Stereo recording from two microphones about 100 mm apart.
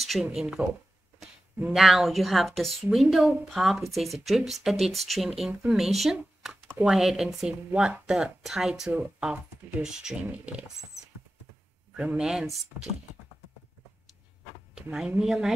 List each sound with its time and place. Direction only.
0.0 s speech: 5° right (ahead or behind)
1.7 s speech: 5° right (ahead or behind)
5.5 s speech: 15° right (ahead or behind)
5.8 s speech: centre (ahead or behind)
6.4 s a sound: 5° right (ahead or behind)
6.8 s speech: 5° right (ahead or behind)
12.0 s speech: 10° right (ahead or behind)
14.8 s speech: 10° right (ahead or behind)